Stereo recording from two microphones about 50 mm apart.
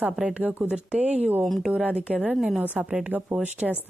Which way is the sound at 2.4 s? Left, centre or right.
Centre.